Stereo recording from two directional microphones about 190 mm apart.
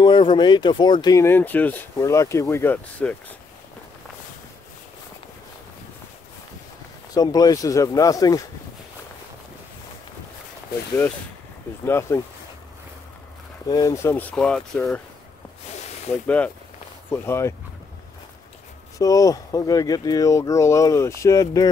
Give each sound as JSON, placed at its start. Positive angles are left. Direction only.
{"t": 0.0, "sound": "speech", "side_deg": 25}
{"t": 7.2, "sound": "speech", "side_deg": 20}
{"t": 11.8, "sound": "speech", "side_deg": 15}
{"t": 13.7, "sound": "speech", "side_deg": 20}
{"t": 16.3, "sound": "speech", "side_deg": 5}
{"t": 18.9, "sound": "speech", "side_deg": 20}